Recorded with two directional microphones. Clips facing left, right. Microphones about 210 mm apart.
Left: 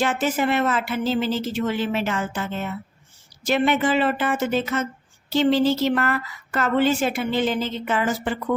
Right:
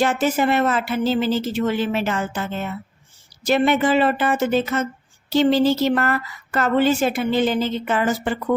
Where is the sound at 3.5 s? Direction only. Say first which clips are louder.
Right 3 dB; 40° right (ahead or behind).